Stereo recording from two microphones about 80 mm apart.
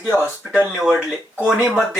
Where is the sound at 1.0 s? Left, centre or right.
Centre.